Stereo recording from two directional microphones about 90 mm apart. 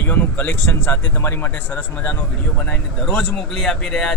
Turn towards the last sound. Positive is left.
turn(degrees=5)  # may be behind; listen again after turning